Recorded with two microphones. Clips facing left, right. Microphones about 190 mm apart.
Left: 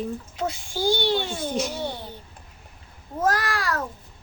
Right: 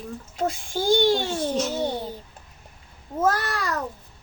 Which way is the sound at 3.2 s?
20° right (ahead or behind).